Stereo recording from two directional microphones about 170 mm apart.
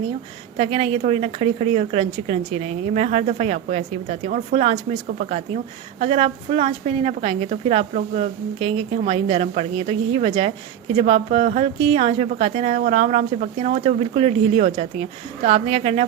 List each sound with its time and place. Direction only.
0.5 s a woman's voice: 40° right (ahead or behind)
5.0 s speech: 55° right (ahead or behind)
6.0 s a woman's voice: 35° right (ahead or behind)